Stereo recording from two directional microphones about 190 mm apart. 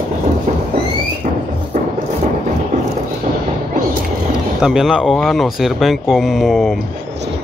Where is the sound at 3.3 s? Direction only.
40° right (ahead or behind).